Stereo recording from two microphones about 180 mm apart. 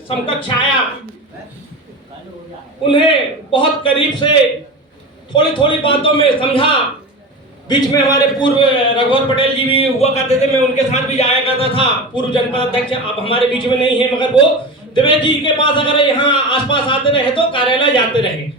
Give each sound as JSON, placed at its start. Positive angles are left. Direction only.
{"t": 0.3, "sound": "a man's voice", "side_deg": 25}
{"t": 2.8, "sound": "a man's voice", "side_deg": 30}